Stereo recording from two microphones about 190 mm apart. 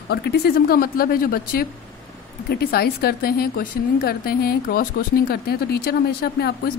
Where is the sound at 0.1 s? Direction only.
60° left (ahead or behind).